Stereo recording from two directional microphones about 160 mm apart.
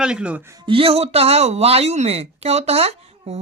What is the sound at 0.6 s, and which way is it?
Speech, 35° right (ahead or behind).